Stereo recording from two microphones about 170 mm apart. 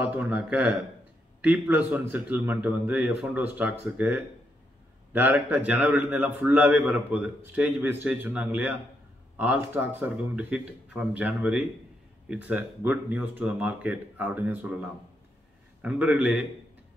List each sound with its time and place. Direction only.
0.0 s a man's voice: 10° right (ahead or behind)